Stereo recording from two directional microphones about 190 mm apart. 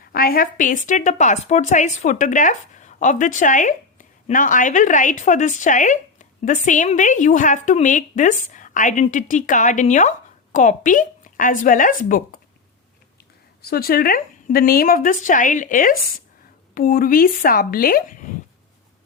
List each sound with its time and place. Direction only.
0.0 s a woman's voice: 50° left (ahead or behind)
13.7 s speech: 55° left (ahead or behind)